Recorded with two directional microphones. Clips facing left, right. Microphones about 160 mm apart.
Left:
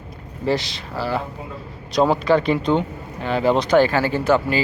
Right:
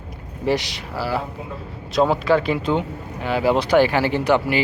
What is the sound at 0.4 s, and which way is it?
A man's voice, 15° right (ahead or behind).